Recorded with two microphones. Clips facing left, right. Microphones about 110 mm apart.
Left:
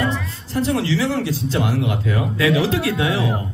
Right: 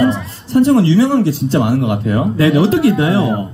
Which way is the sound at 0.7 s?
30° right (ahead or behind).